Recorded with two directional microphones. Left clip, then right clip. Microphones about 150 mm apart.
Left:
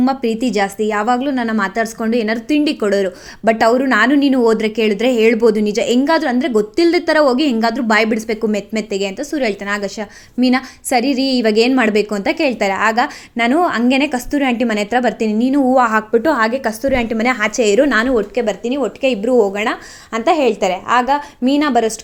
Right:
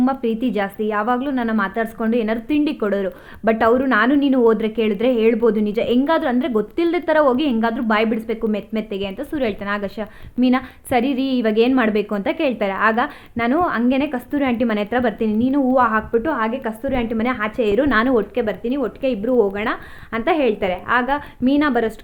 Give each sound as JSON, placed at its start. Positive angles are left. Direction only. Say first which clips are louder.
{"t": 0.0, "sound": "a woman's voice", "louder": "left 3 dB", "side_deg": 20}
{"t": 0.3, "sound": "a woman's voice", "louder": "left 3 dB", "side_deg": -30}
{"t": 0.6, "sound": "a woman's voice", "louder": "left 5 dB", "side_deg": 20}
{"t": 6.1, "sound": "a woman's voice", "louder": "left 3 dB", "side_deg": 10}
{"t": 6.7, "sound": "a woman's voice", "louder": "left 4 dB", "side_deg": 20}
{"t": 9.3, "sound": "a woman's voice", "louder": "left 2 dB", "side_deg": 15}
{"t": 14.3, "sound": "a woman's voice", "louder": "left 3 dB", "side_deg": 15}
{"t": 18.0, "sound": "speech", "louder": "left 2 dB", "side_deg": 5}
{"t": 18.4, "sound": "a woman's voice", "louder": "left 4 dB", "side_deg": 15}